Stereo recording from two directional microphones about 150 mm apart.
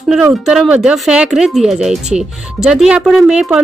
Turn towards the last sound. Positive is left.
turn(degrees=-5)  # may be behind; listen again after turning